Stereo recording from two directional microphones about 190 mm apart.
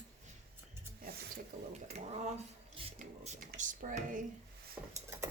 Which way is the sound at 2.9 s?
40° right (ahead or behind).